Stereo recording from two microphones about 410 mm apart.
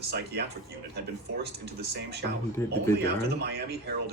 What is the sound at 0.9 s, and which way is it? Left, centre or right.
Speech, right.